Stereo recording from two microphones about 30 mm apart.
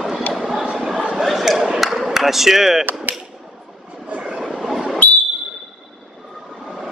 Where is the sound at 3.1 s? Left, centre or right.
Right.